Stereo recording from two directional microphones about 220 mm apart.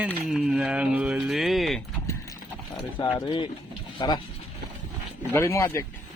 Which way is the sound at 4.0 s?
20° left (ahead or behind).